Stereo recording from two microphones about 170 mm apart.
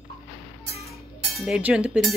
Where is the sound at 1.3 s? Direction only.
5° right (ahead or behind).